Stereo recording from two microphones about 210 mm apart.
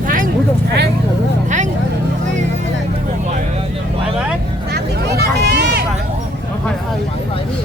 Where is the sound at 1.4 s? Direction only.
35° right (ahead or behind).